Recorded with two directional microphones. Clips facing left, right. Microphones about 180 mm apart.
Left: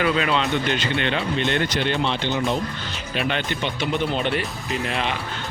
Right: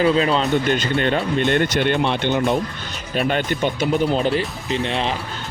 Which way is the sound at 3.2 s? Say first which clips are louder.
Right 5 dB; 45° right (ahead or behind).